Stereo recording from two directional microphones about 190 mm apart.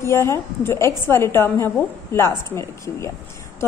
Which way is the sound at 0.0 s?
15° left (ahead or behind).